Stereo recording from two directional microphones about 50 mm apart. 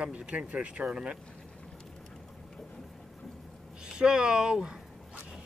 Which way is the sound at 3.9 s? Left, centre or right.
Centre.